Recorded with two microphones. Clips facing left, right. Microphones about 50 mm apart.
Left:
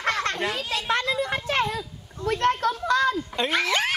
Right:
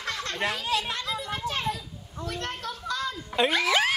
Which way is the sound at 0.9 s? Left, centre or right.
Left.